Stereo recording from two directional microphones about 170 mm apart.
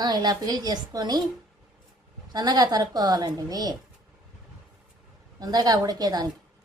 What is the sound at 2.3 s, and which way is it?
Speech, 25° right (ahead or behind).